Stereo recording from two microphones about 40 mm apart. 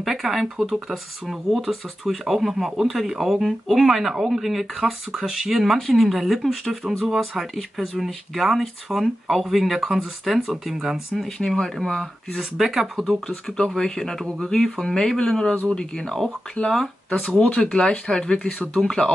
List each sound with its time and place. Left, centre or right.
0.0 s speech: centre
11.1 s speech: centre
12.5 s speech: centre
13.7 s speech: centre
16.7 s speech: centre
17.6 s speech: centre